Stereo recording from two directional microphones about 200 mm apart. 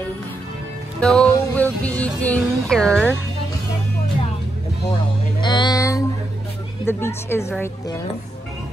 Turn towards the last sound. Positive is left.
turn(degrees=15)  # may be behind; listen again after turning